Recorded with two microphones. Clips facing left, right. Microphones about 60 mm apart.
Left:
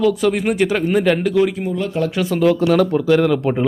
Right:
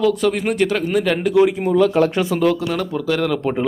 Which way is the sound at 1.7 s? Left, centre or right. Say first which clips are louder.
Right 6 dB; right.